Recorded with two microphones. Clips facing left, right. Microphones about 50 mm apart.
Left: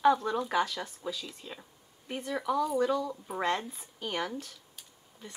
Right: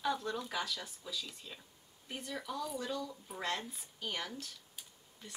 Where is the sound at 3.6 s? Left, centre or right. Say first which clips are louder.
Left 5 dB; centre.